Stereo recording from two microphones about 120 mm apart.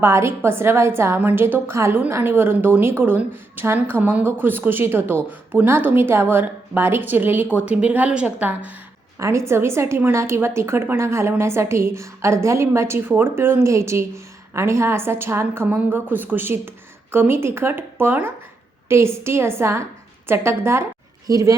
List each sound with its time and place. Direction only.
0.0 s a woman's voice: 20° right (ahead or behind)
9.1 s a woman's voice: 25° right (ahead or behind)